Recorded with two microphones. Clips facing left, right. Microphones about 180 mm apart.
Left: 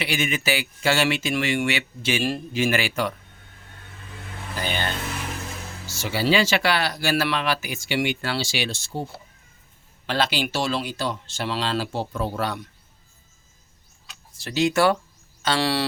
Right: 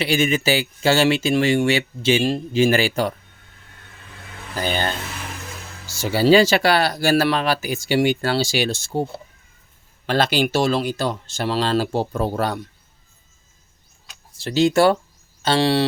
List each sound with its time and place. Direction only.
0.0 s speech: 30° right (ahead or behind)
4.6 s speech: 40° right (ahead or behind)
5.9 s speech: 40° right (ahead or behind)
14.3 s speech: 25° right (ahead or behind)